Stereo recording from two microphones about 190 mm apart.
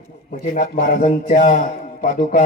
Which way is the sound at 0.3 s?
45° left (ahead or behind).